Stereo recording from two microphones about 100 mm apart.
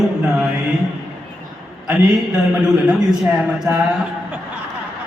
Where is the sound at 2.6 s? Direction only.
5° right (ahead or behind).